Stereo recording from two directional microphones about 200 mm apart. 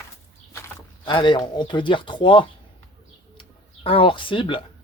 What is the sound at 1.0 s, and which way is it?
Speech, 25° left (ahead or behind).